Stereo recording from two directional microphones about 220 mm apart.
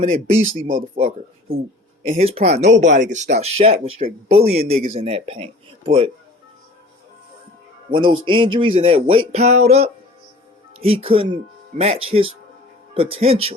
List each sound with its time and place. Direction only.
0.0 s speech: 30° right (ahead or behind)
7.9 s speech: 20° right (ahead or behind)